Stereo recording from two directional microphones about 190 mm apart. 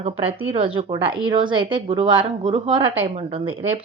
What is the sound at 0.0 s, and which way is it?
Speech, 30° right (ahead or behind).